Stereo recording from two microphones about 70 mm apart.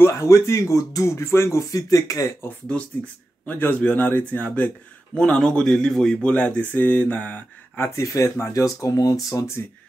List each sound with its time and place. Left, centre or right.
0.0 s speech: left
3.4 s speech: left
7.9 s speech: left